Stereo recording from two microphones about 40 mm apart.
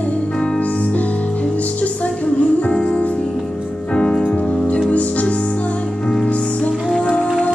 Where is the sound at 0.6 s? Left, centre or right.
Left.